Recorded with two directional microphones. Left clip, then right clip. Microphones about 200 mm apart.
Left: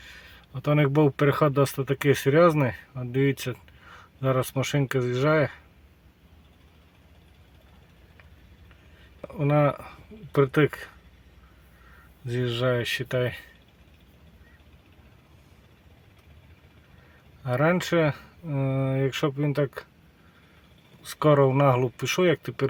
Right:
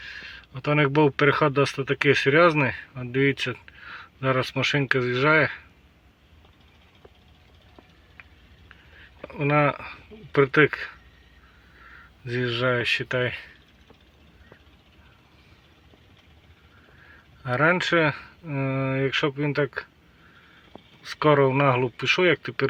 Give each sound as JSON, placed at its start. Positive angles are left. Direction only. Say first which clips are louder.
{"t": 0.0, "sound": "speech", "louder": "right 8 dB", "side_deg": 25}
{"t": 9.2, "sound": "speech", "louder": "right 2 dB", "side_deg": 20}
{"t": 12.2, "sound": "speech", "louder": "right 2 dB", "side_deg": 20}
{"t": 17.4, "sound": "speech", "louder": "right 3 dB", "side_deg": 20}
{"t": 21.2, "sound": "speech", "louder": "right 1 dB", "side_deg": 20}